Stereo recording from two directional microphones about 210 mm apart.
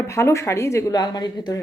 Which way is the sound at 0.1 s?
15° left (ahead or behind).